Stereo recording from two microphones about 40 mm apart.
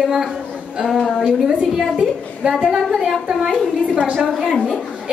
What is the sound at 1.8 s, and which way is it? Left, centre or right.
A woman's voice, centre.